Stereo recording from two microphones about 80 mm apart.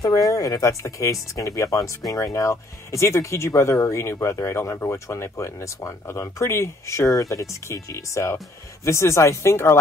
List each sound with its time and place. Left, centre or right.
0.3 s speech: left